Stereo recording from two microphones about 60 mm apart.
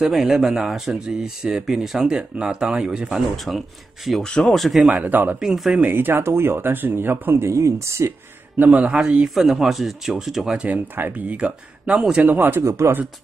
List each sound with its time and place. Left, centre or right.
0.0 s speech: centre
3.3 s speech: centre
4.8 s speech: right
5.4 s speech: centre
5.8 s speech: right
7.4 s speech: right
8.6 s speech: centre
9.3 s speech: centre
10.6 s speech: right
12.2 s speech: right
12.6 s speech: right